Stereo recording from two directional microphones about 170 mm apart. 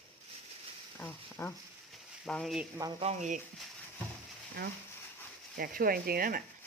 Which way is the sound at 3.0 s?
45° right (ahead or behind).